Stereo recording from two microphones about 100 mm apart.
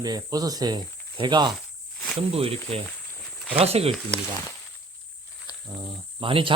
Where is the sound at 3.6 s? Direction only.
90° right.